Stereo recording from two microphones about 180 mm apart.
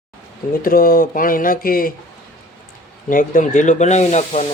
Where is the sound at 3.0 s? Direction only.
50° left (ahead or behind).